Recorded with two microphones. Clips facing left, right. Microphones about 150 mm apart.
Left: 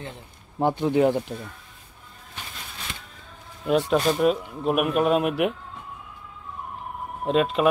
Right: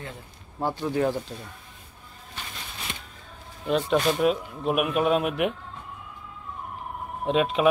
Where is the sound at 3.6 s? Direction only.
5° left (ahead or behind).